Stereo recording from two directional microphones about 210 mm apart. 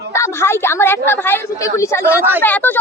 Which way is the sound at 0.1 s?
10° left (ahead or behind).